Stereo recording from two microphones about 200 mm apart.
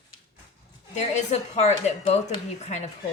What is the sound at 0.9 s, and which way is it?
A woman's voice, 35° left (ahead or behind).